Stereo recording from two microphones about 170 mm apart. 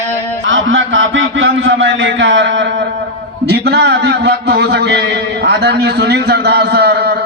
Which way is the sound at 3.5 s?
75° right (ahead or behind).